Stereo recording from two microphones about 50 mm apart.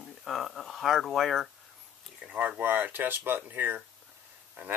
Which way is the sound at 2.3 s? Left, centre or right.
Right.